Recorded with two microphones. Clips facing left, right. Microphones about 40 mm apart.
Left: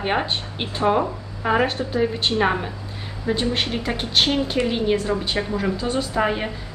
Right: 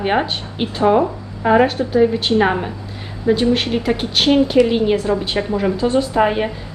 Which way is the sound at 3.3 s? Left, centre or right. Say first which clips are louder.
Right 7 dB; right.